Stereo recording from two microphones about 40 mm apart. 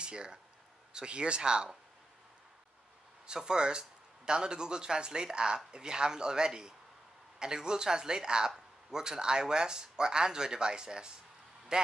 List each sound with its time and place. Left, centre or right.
0.0 s speech: right
3.3 s speech: right